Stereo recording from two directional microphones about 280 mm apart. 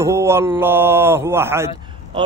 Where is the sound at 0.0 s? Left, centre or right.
Centre.